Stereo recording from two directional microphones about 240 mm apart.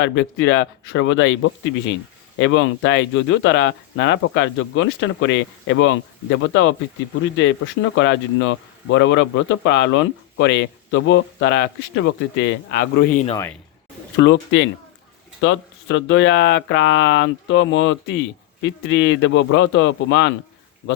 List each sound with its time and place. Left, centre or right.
0.0 s speech: left
13.0 s speech: left
13.3 s speech: centre
14.2 s speech: left